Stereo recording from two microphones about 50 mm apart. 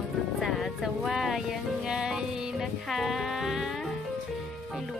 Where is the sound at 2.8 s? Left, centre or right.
Centre.